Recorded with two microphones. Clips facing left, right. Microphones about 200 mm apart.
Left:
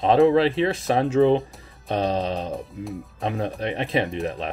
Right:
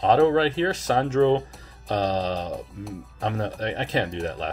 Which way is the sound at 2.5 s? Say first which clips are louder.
Left 2 dB; centre (ahead or behind).